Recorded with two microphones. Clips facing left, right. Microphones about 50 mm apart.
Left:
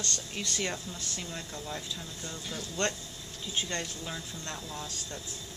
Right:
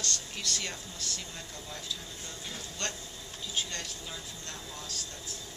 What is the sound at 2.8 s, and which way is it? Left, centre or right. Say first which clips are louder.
Speech: left 7 dB; left.